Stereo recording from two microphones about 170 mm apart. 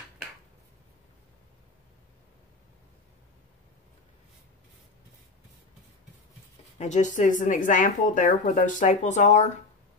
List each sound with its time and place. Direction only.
6.8 s speech: 45° left (ahead or behind)